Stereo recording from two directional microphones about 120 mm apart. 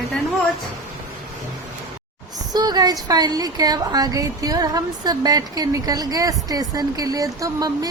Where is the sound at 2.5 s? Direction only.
35° right (ahead or behind).